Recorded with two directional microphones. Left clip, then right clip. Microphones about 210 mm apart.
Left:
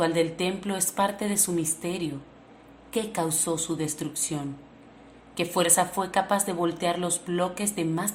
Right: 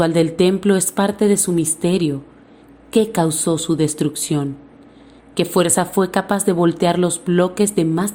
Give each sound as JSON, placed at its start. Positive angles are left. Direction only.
{"t": 0.0, "sound": "a woman's voice", "side_deg": -30}